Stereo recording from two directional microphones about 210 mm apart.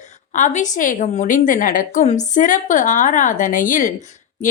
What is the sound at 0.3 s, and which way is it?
A woman's voice, 35° left (ahead or behind).